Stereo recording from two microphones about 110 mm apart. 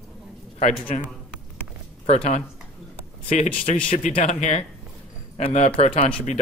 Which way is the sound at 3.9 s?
75° left (ahead or behind).